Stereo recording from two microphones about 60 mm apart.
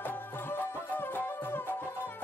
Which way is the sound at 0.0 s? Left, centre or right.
Left.